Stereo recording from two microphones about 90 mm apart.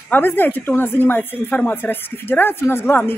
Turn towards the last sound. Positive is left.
turn(degrees=25)  # may be behind; listen again after turning